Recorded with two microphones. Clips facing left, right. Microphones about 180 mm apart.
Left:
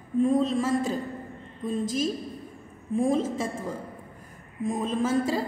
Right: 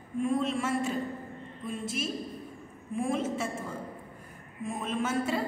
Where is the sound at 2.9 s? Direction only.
35° left (ahead or behind).